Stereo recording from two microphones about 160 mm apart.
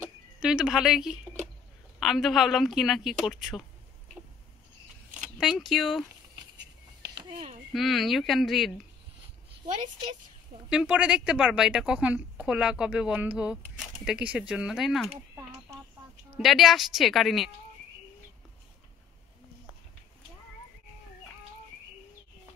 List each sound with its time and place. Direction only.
0.4 s speech: 5° right (ahead or behind)
5.1 s speech: 5° right (ahead or behind)
7.2 s speech: 35° right (ahead or behind)
7.7 s speech: centre (ahead or behind)
10.7 s speech: 5° right (ahead or behind)
16.3 s speech: centre (ahead or behind)